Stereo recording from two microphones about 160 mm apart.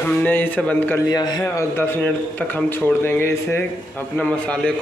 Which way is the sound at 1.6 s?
15° left (ahead or behind).